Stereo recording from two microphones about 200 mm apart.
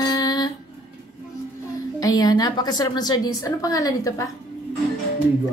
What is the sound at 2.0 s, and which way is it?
A woman's voice, 20° left (ahead or behind).